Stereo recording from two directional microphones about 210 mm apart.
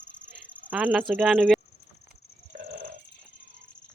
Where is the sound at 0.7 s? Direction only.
5° right (ahead or behind).